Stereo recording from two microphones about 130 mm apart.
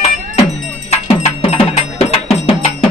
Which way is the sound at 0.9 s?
50° left (ahead or behind).